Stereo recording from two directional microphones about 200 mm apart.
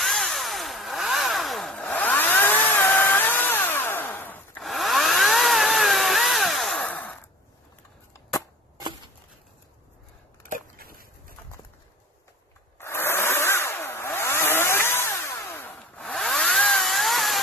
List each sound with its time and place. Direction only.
0.0 s chainsaw: centre (ahead or behind)
10.4 s a sound: 45° right (ahead or behind)
12.8 s chainsaw: 10° left (ahead or behind)